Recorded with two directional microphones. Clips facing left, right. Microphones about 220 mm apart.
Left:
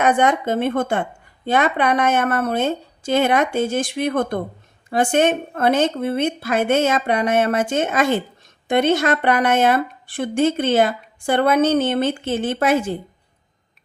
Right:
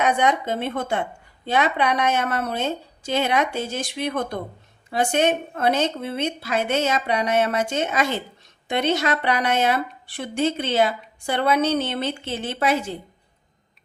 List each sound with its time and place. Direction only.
0.0 s a woman's voice: 50° left (ahead or behind)